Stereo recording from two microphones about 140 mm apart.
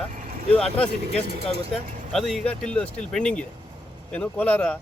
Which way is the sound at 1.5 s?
45° right (ahead or behind).